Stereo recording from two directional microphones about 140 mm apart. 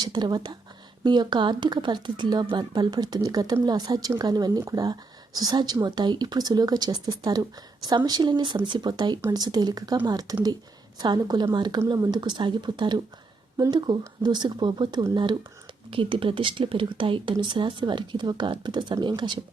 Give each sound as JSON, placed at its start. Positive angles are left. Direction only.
{"t": 0.0, "sound": "speech", "side_deg": -30}